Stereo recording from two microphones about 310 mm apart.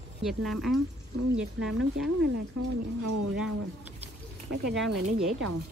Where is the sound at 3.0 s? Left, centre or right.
Right.